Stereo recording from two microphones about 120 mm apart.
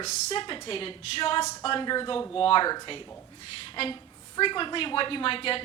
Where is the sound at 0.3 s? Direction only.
45° left (ahead or behind).